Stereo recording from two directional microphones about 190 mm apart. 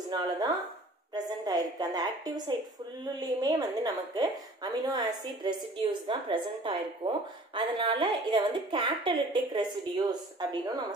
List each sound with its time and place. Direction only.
0.1 s a woman's voice: 20° right (ahead or behind)